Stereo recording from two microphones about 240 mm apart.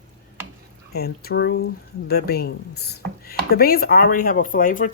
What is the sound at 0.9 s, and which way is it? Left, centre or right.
Speech, left.